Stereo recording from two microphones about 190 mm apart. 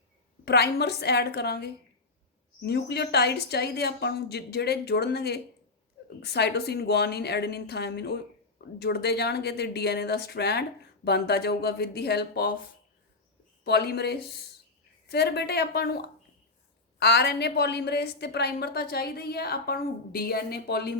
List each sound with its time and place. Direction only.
0.4 s a woman's voice: 60° left (ahead or behind)
13.7 s a woman's voice: 55° left (ahead or behind)